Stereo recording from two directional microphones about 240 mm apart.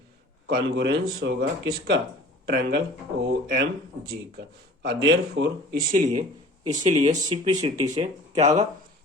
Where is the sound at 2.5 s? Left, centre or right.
Right.